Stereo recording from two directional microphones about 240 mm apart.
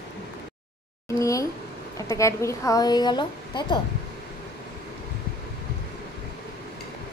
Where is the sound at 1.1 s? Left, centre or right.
Centre.